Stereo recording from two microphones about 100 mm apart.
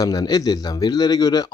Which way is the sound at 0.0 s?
40° left (ahead or behind).